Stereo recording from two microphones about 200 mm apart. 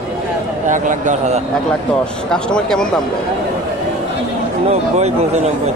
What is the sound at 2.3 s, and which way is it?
Speech, 5° left (ahead or behind).